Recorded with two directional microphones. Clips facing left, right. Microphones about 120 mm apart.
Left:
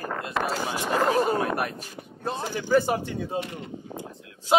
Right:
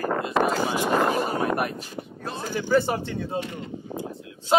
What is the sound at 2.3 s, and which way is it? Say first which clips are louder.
A man's voice: even; 20° left (ahead or behind).